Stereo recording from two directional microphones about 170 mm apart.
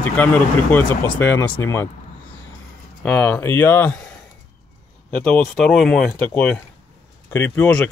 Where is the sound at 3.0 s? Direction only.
5° left (ahead or behind).